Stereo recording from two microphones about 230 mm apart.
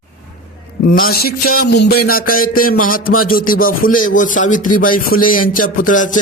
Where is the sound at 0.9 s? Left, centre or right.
Left.